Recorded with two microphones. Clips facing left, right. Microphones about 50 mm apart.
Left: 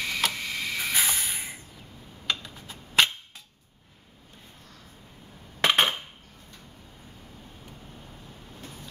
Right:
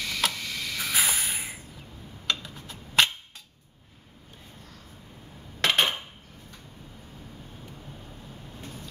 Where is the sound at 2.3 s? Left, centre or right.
Centre.